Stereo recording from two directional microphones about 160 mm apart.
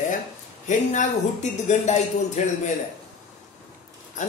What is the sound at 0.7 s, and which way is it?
Speech, 50° left (ahead or behind).